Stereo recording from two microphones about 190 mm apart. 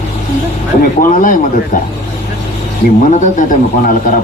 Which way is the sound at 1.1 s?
45° left (ahead or behind).